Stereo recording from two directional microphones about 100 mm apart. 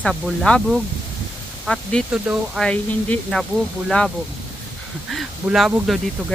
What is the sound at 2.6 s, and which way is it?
Speech, 10° left (ahead or behind).